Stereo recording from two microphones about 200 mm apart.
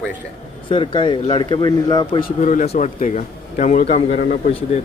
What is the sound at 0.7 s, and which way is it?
Speech, 25° left (ahead or behind).